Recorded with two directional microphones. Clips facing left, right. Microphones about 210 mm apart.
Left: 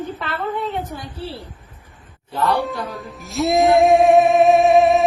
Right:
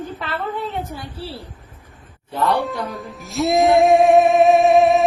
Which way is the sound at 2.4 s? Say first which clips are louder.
Even; centre (ahead or behind).